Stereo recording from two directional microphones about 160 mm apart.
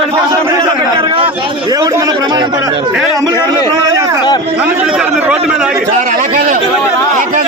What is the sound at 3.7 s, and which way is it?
Speech, 25° right (ahead or behind).